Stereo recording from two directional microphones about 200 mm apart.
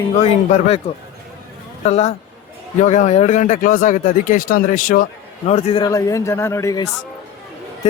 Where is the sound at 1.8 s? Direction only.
35° left (ahead or behind).